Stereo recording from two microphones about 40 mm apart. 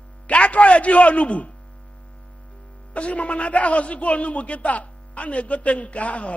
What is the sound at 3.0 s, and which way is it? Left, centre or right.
A man's voice, left.